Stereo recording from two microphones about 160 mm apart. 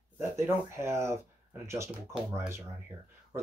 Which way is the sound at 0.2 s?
15° right (ahead or behind).